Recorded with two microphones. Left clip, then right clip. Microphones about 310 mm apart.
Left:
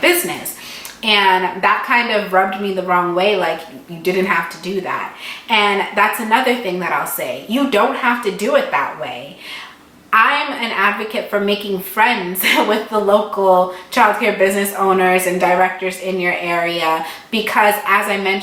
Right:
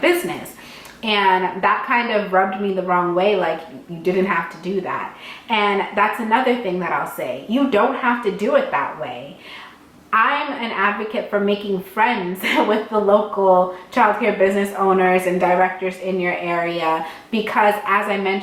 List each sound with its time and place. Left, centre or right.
0.0 s a sound: centre
1.1 s a woman's voice: centre
10.4 s a woman's voice: centre
12.9 s speech: centre
13.9 s a woman's voice: centre